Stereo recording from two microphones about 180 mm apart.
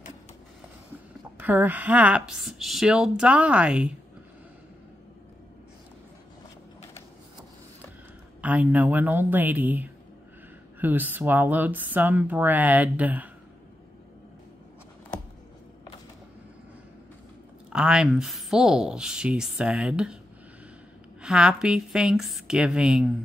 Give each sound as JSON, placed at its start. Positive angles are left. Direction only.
{"t": 1.4, "sound": "speech", "side_deg": -10}
{"t": 8.4, "sound": "speech", "side_deg": -10}
{"t": 17.7, "sound": "speech", "side_deg": -5}
{"t": 21.2, "sound": "speech", "side_deg": -5}